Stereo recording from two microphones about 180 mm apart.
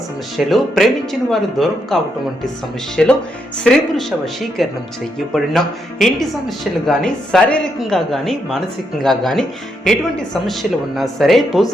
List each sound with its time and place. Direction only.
0.3 s speech: centre (ahead or behind)